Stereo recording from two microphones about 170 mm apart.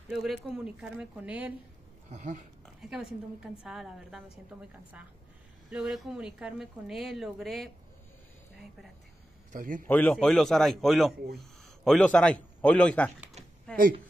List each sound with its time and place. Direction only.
0.1 s a woman's voice: 5° right (ahead or behind)
2.0 s speech: 45° right (ahead or behind)
2.6 s a woman's voice: 5° right (ahead or behind)
9.5 s speech: 55° right (ahead or behind)
9.8 s a man's voice: 10° left (ahead or behind)